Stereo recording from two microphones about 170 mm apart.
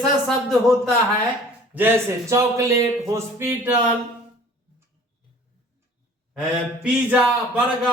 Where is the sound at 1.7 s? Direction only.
15° right (ahead or behind).